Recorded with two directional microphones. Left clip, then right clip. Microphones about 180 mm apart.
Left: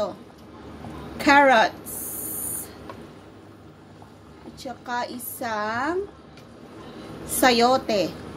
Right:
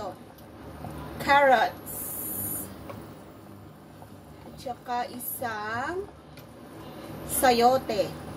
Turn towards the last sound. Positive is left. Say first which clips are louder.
# left 2 dB
turn(degrees=50)  # may be behind; listen again after turning